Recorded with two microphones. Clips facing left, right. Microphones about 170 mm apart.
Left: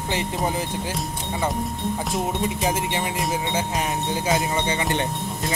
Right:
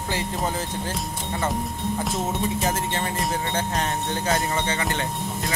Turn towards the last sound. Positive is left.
turn(degrees=20)  # may be behind; listen again after turning